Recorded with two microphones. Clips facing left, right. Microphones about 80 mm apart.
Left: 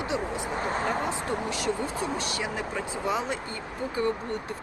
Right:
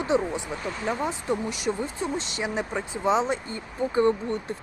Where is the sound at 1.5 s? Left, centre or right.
Centre.